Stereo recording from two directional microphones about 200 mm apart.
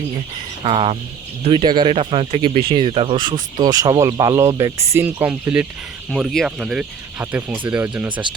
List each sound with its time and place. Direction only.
0.6 s speech: 30° right (ahead or behind); by 8.2 s 5° right (ahead or behind)